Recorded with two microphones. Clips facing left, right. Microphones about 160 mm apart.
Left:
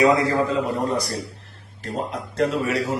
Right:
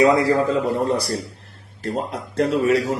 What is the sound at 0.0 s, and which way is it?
A man's voice, 30° right (ahead or behind).